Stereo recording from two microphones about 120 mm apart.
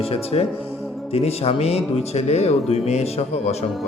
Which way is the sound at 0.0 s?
55° left (ahead or behind).